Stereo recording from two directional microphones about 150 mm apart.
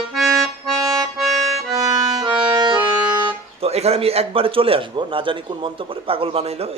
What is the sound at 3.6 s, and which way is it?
A man's voice, 45° right (ahead or behind).